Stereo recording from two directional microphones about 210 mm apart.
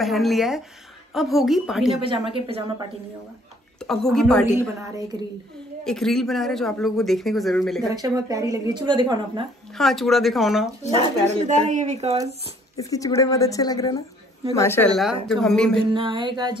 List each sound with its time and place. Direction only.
0.0 s speech: centre (ahead or behind)
2.2 s speech: 25° right (ahead or behind)
3.8 s speech: 5° left (ahead or behind)
4.6 s a woman's voice: 15° right (ahead or behind)
5.9 s speech: centre (ahead or behind)
7.9 s speech: 15° right (ahead or behind)
9.8 s speech: centre (ahead or behind)
11.0 s speech: 35° right (ahead or behind)
12.7 s speech: 15° left (ahead or behind)
15.9 s speech: 25° right (ahead or behind)